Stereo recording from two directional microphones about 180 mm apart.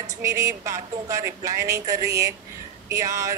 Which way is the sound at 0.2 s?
15° right (ahead or behind).